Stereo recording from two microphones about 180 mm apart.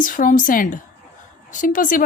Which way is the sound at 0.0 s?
50° left (ahead or behind).